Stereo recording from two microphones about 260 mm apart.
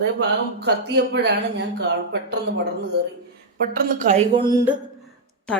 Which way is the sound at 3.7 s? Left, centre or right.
Right.